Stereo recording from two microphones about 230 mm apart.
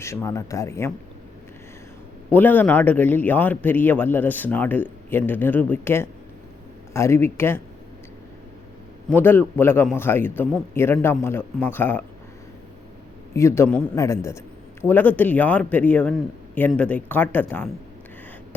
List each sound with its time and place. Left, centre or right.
0.0 s a man's voice: centre
2.3 s a man's voice: centre
9.0 s a man's voice: centre
13.3 s a man's voice: centre